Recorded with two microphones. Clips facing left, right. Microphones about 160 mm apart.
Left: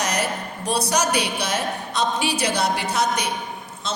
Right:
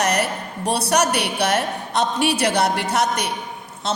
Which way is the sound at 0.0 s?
65° right (ahead or behind).